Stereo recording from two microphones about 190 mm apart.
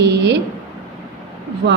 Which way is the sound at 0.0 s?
65° right (ahead or behind).